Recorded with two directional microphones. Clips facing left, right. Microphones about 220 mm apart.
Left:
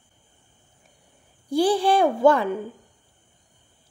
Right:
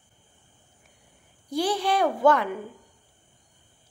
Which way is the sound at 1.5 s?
30° left (ahead or behind).